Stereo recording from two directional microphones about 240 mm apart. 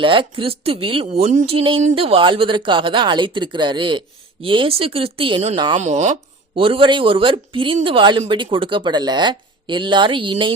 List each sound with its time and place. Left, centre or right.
0.0 s speech: right